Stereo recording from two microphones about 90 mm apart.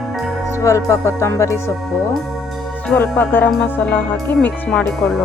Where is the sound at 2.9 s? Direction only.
20° left (ahead or behind).